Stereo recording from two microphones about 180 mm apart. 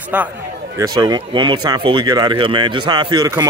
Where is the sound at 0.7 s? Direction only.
20° right (ahead or behind).